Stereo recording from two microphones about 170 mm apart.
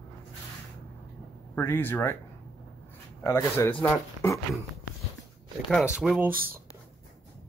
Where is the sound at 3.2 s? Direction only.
15° left (ahead or behind).